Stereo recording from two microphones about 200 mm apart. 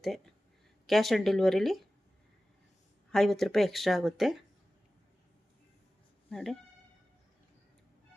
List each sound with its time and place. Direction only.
0.9 s speech: centre (ahead or behind)
3.1 s speech: centre (ahead or behind)
6.3 s speech: centre (ahead or behind)